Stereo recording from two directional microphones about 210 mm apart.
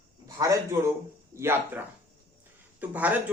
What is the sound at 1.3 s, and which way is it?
Speech, 10° right (ahead or behind).